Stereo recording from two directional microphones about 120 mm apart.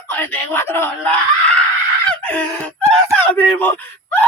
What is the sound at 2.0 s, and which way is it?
Screaming, 10° left (ahead or behind).